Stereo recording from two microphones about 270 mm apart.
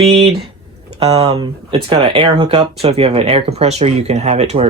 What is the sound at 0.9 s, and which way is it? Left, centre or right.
Speech, right.